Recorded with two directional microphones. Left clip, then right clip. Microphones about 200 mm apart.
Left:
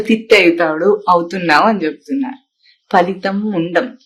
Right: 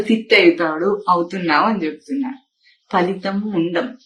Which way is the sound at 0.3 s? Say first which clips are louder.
Left 3 dB; 55° left (ahead or behind).